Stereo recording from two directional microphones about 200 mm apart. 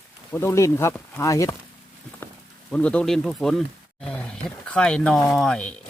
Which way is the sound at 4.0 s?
5° left (ahead or behind).